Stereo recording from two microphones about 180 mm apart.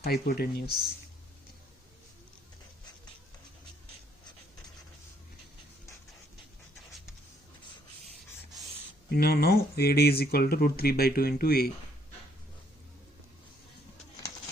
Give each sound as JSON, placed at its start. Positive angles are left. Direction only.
{"t": 0.0, "sound": "speech", "side_deg": 60}
{"t": 9.0, "sound": "speech", "side_deg": 60}